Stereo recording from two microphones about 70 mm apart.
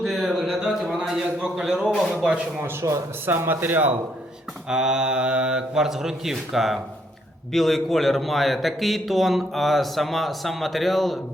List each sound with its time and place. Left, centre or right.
0.0 s a sound: centre
2.0 s speech: centre
2.6 s a man's voice: right
4.7 s a man's voice: centre